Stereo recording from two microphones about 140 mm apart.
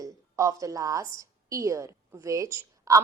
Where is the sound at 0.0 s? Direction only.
25° right (ahead or behind).